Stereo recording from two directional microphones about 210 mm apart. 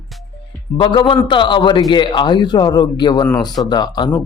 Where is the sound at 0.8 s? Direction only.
25° left (ahead or behind).